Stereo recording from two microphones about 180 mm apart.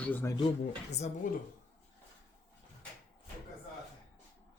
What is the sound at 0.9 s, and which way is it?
Speech, 40° left (ahead or behind).